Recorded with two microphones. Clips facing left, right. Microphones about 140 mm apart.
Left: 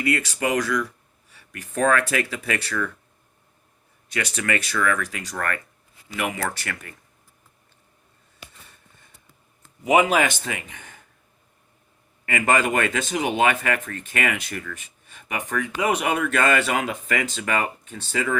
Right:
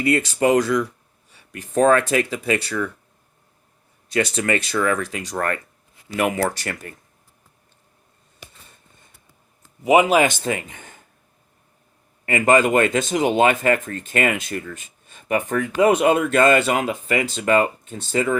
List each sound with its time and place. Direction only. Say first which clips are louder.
0.0 s speech: right 6 dB; 30° right (ahead or behind)
4.1 s speech: right 5 dB; 30° right (ahead or behind)
6.1 s speech: right 6 dB; 40° right (ahead or behind)
9.8 s speech: right 3 dB; 20° right (ahead or behind)
10.2 s speech: right 5 dB; 35° right (ahead or behind)
12.2 s speech: right 5 dB; 30° right (ahead or behind)
15.3 s speech: right 6 dB; 40° right (ahead or behind)
16.0 s speech: right 6 dB; 30° right (ahead or behind)